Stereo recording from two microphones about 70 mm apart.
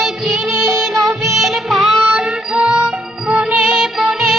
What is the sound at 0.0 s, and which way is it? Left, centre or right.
Music, centre.